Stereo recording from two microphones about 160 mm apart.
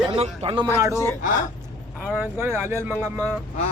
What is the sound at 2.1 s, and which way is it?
Speech, 15° right (ahead or behind).